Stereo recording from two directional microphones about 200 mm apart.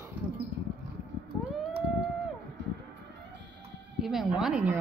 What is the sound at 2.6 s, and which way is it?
Music, 60° right (ahead or behind).